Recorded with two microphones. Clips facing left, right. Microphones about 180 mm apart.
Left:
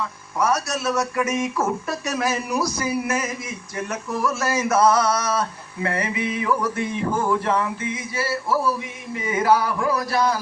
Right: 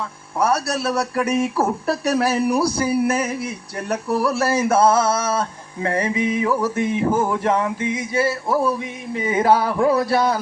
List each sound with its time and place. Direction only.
0.3 s speech: 30° right (ahead or behind)
6.1 s music: 10° right (ahead or behind)